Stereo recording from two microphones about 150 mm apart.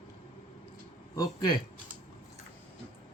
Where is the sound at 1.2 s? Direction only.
30° left (ahead or behind).